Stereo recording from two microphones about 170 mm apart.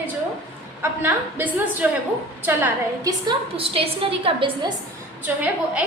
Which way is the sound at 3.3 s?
35° right (ahead or behind).